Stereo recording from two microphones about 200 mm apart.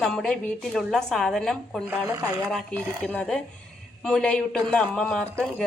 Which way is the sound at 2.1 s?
20° right (ahead or behind).